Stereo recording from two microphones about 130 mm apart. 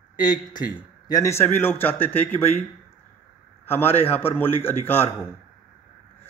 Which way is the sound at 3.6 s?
15° left (ahead or behind).